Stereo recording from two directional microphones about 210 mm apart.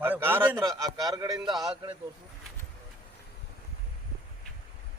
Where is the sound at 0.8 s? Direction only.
15° right (ahead or behind).